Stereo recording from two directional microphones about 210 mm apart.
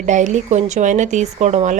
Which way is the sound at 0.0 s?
35° right (ahead or behind).